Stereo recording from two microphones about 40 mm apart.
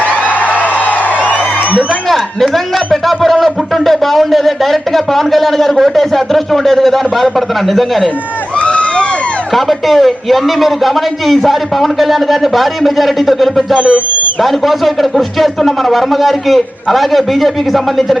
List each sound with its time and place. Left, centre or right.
0.1 s a sound: left
0.6 s music: left
2.0 s a man's voice: centre
8.5 s a sound: left
9.5 s a man's voice: centre
13.7 s speech: right
14.4 s a man's voice: centre